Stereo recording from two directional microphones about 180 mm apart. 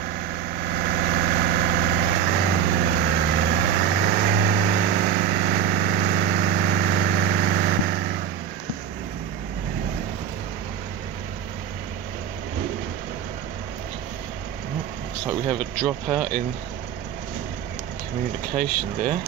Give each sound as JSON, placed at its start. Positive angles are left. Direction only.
{"t": 0.8, "sound": "vehicle", "side_deg": -60}
{"t": 15.9, "sound": "speech", "side_deg": -5}